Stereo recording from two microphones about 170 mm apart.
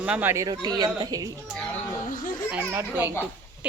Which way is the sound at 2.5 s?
10° right (ahead or behind).